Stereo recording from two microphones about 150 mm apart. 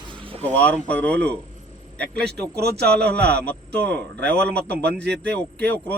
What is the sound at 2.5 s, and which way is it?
Speech, 90° right.